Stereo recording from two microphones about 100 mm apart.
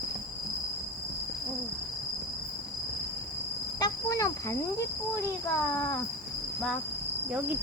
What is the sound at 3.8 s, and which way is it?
Cricket, 35° left (ahead or behind).